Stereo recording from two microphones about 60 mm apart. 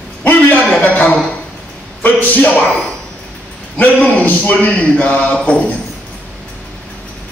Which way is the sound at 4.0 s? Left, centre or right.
Left.